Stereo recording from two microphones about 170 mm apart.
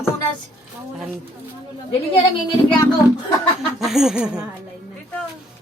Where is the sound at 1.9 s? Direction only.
30° left (ahead or behind).